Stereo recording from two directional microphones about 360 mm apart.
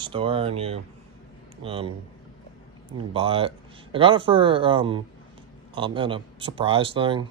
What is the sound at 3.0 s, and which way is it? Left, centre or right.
Speech, centre.